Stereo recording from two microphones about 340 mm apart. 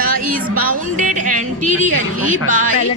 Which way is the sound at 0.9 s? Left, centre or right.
Right.